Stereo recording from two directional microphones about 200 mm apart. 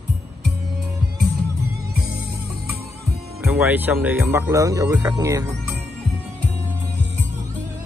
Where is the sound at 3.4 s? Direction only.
10° right (ahead or behind).